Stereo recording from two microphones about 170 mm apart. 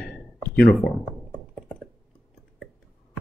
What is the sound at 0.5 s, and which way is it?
Computer keyboard, 5° left (ahead or behind).